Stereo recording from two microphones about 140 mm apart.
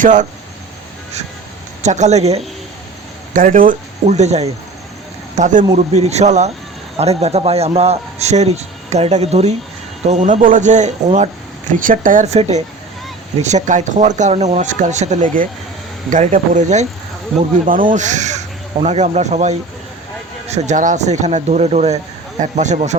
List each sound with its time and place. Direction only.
0.0 s speech: 60° right (ahead or behind)
1.8 s a man's voice: 55° right (ahead or behind)
3.3 s a man's voice: 75° right (ahead or behind); by 4.5 s 50° right (ahead or behind)
5.4 s speech: 65° right (ahead or behind)
5.7 s a man's voice: 50° right (ahead or behind)
11.9 s speech: 75° right (ahead or behind)
12.2 s a man's voice: 50° right (ahead or behind)
17.9 s speech: 60° right (ahead or behind)